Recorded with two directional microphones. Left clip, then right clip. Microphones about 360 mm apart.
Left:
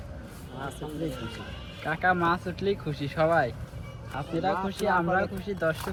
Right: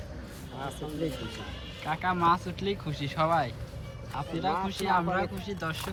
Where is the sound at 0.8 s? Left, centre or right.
Centre.